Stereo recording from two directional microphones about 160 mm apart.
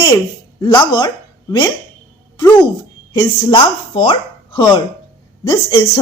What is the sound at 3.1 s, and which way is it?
Speech, 30° left (ahead or behind).